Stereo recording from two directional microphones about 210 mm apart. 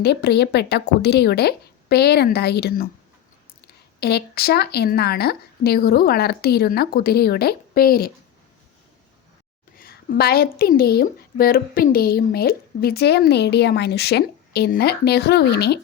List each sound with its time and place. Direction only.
0.0 s a woman's voice: 50° left (ahead or behind)
4.0 s a woman's voice: 50° left (ahead or behind)
9.7 s a woman's voice: 45° left (ahead or behind)